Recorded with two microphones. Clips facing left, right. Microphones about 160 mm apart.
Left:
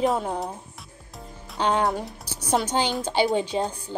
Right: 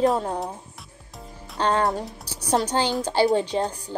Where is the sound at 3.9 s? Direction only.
30° right (ahead or behind).